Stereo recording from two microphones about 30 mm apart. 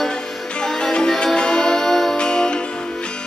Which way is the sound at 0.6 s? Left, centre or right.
Left.